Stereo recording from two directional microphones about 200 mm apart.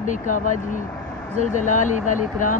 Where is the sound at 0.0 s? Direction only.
40° left (ahead or behind).